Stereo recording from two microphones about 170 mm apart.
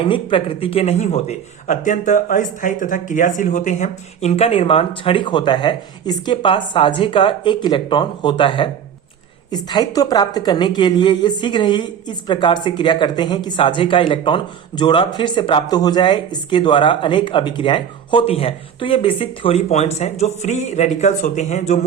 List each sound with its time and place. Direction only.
0.0 s a woman's voice: 30° left (ahead or behind)